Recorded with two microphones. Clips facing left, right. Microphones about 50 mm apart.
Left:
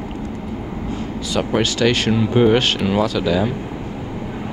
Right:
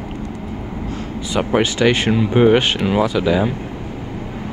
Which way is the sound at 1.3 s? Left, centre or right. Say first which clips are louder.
Right 2 dB; centre.